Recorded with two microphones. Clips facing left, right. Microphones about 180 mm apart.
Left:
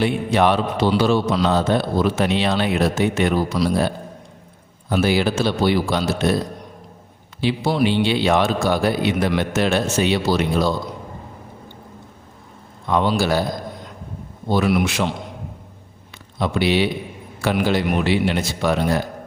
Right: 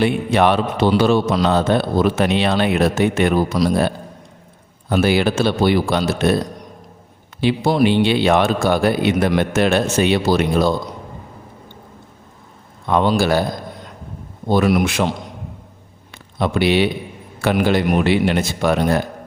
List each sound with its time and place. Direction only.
0.0 s a man's voice: 60° right (ahead or behind)
7.4 s a man's voice: 50° right (ahead or behind)
12.9 s a man's voice: 55° right (ahead or behind)
14.4 s a man's voice: 50° right (ahead or behind)
16.1 s a man's voice: 55° right (ahead or behind)